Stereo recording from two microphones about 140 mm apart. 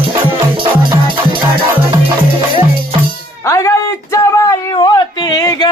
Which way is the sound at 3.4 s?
20° left (ahead or behind).